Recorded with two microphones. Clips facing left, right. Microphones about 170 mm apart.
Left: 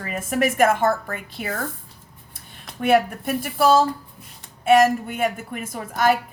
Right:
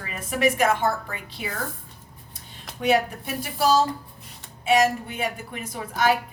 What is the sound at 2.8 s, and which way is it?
A woman's voice, 50° left (ahead or behind).